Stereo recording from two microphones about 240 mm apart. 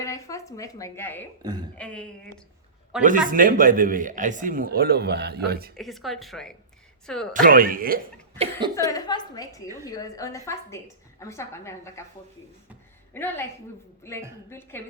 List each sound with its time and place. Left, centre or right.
0.0 s speech: centre
1.4 s a woman's voice: centre
1.7 s a woman's voice: centre
3.0 s speech: right
5.7 s a woman's voice: centre
7.4 s speech: right
8.4 s speech: centre
8.9 s speech: centre
13.1 s speech: centre